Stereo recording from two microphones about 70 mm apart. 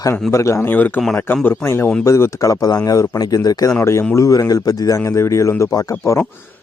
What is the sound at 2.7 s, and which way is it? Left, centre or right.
Speech, left.